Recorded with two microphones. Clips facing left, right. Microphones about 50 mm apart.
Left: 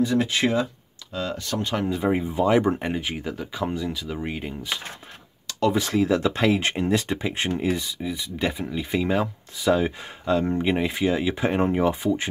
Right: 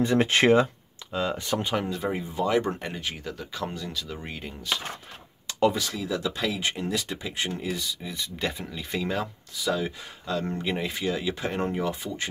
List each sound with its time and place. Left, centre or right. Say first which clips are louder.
0.0 s speech: right 1 dB; right
1.1 s speech: right 1 dB; centre
1.9 s speech: left 6 dB; centre
5.8 s speech: left 8 dB; left
8.0 s speech: left 5 dB; centre